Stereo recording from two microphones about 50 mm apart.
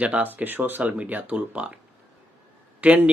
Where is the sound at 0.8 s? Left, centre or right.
Right.